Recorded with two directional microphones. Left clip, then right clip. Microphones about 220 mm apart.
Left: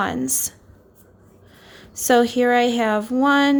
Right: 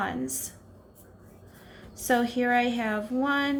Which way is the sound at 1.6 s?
45° left (ahead or behind).